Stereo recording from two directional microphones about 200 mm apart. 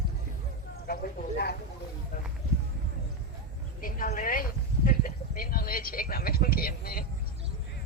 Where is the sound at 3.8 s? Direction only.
45° left (ahead or behind).